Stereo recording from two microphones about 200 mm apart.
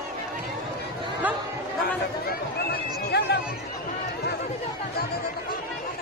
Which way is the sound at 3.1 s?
55° left (ahead or behind).